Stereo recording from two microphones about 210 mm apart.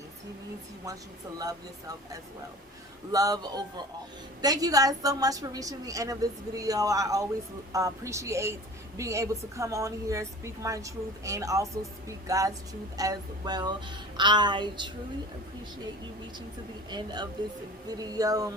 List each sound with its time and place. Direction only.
3.1 s a woman's voice: 15° right (ahead or behind)
13.0 s music: 20° right (ahead or behind)
16.9 s music: 20° right (ahead or behind)
17.8 s a woman's voice: 20° right (ahead or behind)